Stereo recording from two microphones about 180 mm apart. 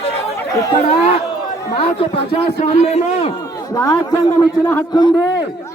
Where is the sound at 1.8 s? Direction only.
30° left (ahead or behind).